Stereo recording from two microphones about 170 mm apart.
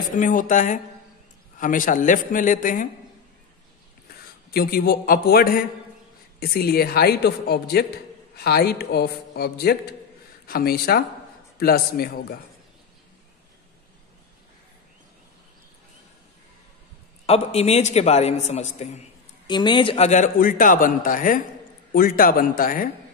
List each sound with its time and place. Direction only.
0.1 s a man's voice: 50° left (ahead or behind)
4.6 s a man's voice: 60° left (ahead or behind)
17.3 s a man's voice: 40° left (ahead or behind)
19.4 s a man's voice: 25° left (ahead or behind); by 22.8 s 55° left (ahead or behind)